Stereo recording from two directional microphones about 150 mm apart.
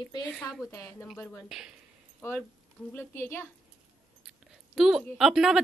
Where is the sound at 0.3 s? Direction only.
5° left (ahead or behind).